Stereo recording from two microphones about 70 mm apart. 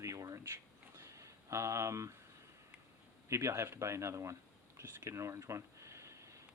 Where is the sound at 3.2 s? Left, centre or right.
Right.